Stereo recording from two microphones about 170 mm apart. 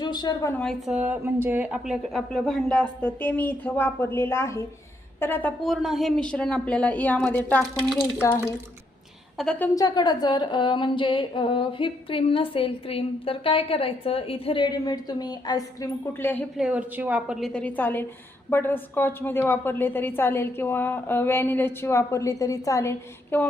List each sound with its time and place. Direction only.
0.0 s a woman's voice: 25° left (ahead or behind)
0.6 s speech: 5° left (ahead or behind)
0.9 s a woman's voice: 10° right (ahead or behind)
9.4 s speech: 5° left (ahead or behind)
9.7 s a sound: 25° left (ahead or behind)
16.6 s a woman's voice: 5° right (ahead or behind)
17.4 s a woman's voice: 5° left (ahead or behind)